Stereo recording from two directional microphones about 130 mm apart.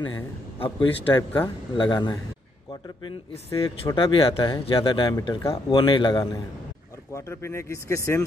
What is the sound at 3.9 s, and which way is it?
Speech, 40° left (ahead or behind).